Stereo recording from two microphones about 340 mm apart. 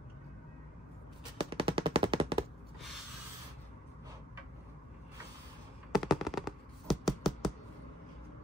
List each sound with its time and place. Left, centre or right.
1.4 s machine gun: centre
5.9 s computer keyboard: centre